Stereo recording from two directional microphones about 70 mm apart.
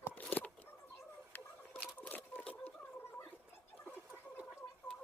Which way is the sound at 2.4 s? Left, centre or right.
Left.